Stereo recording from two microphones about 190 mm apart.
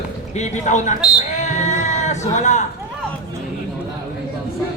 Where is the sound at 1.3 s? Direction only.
40° left (ahead or behind).